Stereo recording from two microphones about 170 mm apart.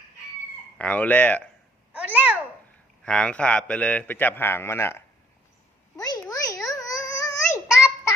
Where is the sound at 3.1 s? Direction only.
5° left (ahead or behind).